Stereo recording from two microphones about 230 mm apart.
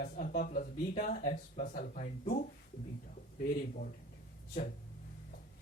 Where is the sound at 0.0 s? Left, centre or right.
Left.